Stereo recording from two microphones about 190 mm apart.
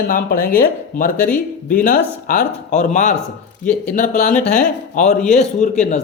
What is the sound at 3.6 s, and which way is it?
Speech, 5° left (ahead or behind).